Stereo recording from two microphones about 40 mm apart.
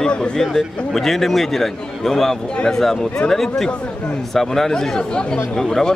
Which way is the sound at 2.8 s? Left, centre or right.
Centre.